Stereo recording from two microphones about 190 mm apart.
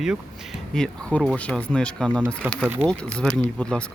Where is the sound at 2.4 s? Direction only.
10° right (ahead or behind).